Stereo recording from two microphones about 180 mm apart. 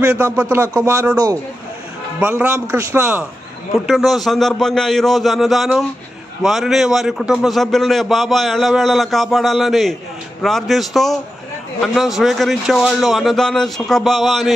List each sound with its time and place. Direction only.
0.0 s a man's voice: 10° right (ahead or behind)
2.1 s a man's voice: 10° right (ahead or behind)